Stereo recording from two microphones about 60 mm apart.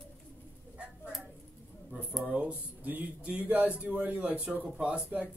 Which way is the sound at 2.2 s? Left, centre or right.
Right.